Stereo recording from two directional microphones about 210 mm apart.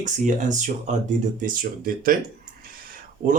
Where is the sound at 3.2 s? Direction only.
40° right (ahead or behind).